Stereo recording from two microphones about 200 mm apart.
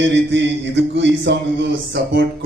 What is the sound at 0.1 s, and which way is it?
Speech, 60° right (ahead or behind).